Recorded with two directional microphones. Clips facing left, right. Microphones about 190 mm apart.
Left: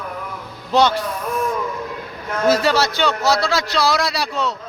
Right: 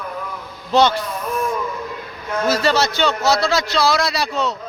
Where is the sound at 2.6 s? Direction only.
10° left (ahead or behind).